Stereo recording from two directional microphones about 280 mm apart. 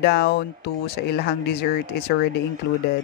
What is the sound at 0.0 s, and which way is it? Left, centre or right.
A man's voice, left.